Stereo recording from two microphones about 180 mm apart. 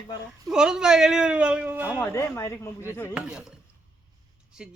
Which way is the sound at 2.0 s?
15° left (ahead or behind).